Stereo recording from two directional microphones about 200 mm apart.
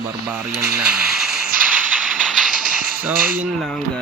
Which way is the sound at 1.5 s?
45° right (ahead or behind).